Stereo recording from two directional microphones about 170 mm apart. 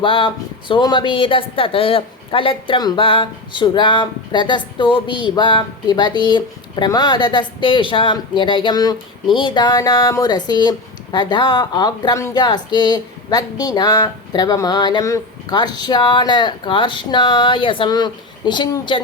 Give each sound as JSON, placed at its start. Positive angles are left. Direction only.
{"t": 0.0, "sound": "a woman's voice", "side_deg": 30}